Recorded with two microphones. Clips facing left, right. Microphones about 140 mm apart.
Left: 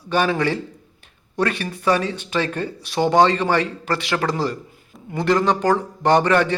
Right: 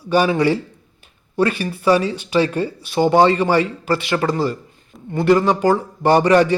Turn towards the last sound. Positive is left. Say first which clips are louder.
# right 3 dB
turn(degrees=-10)  # may be behind; listen again after turning